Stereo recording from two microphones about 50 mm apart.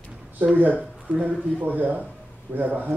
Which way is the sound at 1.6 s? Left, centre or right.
Right.